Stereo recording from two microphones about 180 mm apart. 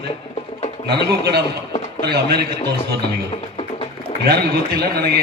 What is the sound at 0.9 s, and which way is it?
A man's voice, 65° right (ahead or behind).